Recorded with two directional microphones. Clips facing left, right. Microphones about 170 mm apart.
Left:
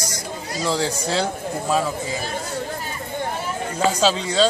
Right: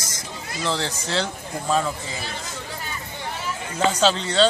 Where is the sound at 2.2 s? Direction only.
45° left (ahead or behind).